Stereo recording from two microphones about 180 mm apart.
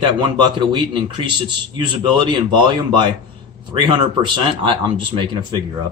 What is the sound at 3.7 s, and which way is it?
Speech, 25° right (ahead or behind).